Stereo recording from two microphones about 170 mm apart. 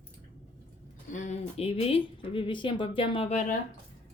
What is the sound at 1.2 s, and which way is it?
Speech, 40° left (ahead or behind).